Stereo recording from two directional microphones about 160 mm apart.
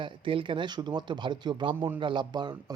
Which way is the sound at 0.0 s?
30° right (ahead or behind).